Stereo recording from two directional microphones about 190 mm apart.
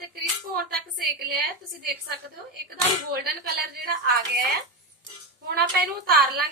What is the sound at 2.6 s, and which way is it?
Speech, 55° right (ahead or behind).